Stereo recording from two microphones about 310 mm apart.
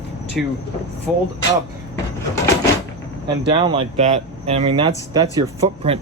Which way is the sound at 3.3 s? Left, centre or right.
Centre.